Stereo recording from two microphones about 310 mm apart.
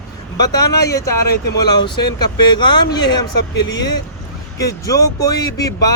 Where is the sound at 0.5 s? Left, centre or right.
Centre.